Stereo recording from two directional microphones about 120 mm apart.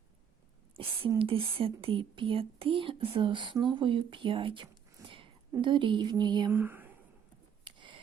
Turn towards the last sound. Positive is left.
turn(degrees=-40)  # may be behind; listen again after turning